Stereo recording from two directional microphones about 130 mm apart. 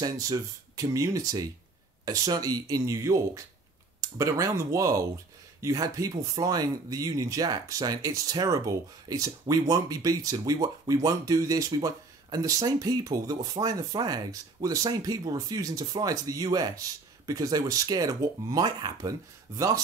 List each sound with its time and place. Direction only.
0.0 s speech: 30° right (ahead or behind)